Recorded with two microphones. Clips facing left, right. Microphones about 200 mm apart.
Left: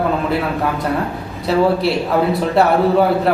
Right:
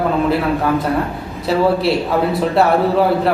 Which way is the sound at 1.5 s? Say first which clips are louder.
Even; centre (ahead or behind).